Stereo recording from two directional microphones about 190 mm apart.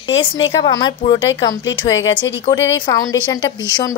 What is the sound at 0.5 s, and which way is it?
A woman's voice, 20° left (ahead or behind).